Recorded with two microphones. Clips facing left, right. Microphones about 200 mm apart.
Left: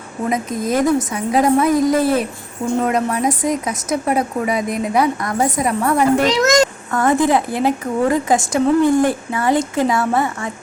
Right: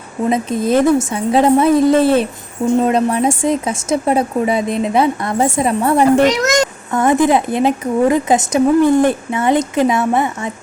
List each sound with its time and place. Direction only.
0.3 s a woman's voice: 30° right (ahead or behind)